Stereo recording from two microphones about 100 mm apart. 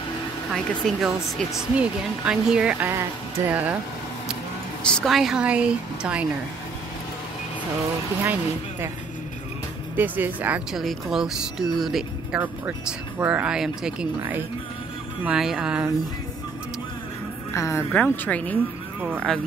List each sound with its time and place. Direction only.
0.5 s speech: 5° right (ahead or behind)
4.8 s a woman's voice: 10° left (ahead or behind)
5.1 s speech: 5° right (ahead or behind)
9.9 s speech: 20° right (ahead or behind)
10.7 s speech: centre (ahead or behind)
15.2 s speech: 5° right (ahead or behind)
17.6 s a woman's voice: 30° left (ahead or behind)
17.9 s a woman's voice: 20° left (ahead or behind)
18.9 s speech: 15° right (ahead or behind)